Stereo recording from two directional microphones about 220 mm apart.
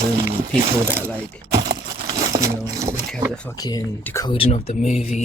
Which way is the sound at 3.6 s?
15° left (ahead or behind).